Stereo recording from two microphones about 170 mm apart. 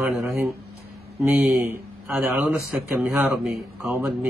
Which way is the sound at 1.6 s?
15° right (ahead or behind).